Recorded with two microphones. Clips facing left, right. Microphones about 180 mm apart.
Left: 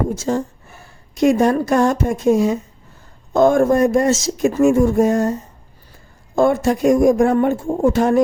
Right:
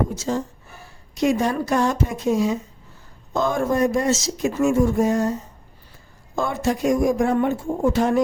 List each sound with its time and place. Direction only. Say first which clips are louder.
0.2 s speech: left 4 dB; 50° left (ahead or behind)
6.3 s speech: left 8 dB; 50° left (ahead or behind)